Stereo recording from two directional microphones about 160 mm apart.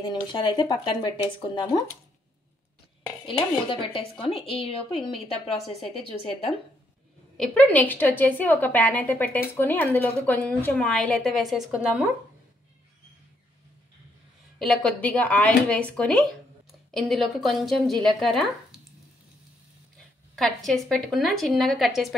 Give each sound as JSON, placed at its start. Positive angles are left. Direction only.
{"t": 0.0, "sound": "speech", "side_deg": 25}
{"t": 3.6, "sound": "a woman's voice", "side_deg": 35}
{"t": 7.3, "sound": "a woman's voice", "side_deg": 5}
{"t": 14.6, "sound": "a woman's voice", "side_deg": 5}
{"t": 20.3, "sound": "speech", "side_deg": 0}